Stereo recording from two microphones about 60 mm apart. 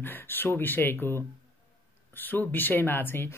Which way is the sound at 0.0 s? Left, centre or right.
Left.